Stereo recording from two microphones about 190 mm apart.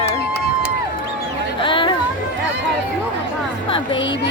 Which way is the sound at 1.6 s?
25° left (ahead or behind).